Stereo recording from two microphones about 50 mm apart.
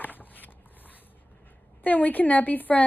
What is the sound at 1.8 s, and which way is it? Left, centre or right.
A woman's voice, left.